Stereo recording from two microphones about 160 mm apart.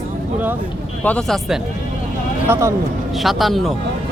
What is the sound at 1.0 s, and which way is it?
Speech, 5° left (ahead or behind).